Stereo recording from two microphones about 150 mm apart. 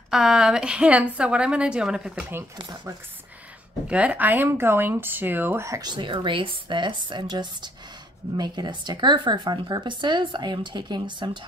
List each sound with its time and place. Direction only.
0.1 s a woman's voice: 5° right (ahead or behind)
2.5 s speech: 30° right (ahead or behind)
3.8 s speech: 10° right (ahead or behind); by 11.3 s 30° right (ahead or behind)